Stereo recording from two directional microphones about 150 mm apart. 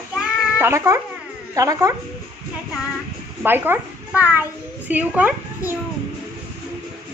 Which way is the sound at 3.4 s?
15° right (ahead or behind).